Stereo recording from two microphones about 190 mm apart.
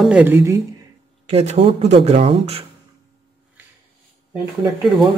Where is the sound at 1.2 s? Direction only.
35° right (ahead or behind).